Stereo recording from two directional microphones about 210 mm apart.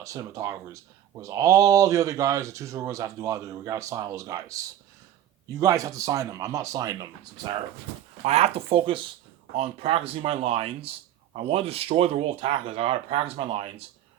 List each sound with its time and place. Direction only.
0.0 s speech: 15° right (ahead or behind)
8.2 s speech: 30° right (ahead or behind)